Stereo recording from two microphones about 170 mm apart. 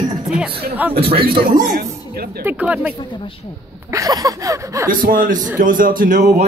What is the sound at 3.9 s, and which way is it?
Speech, 20° right (ahead or behind).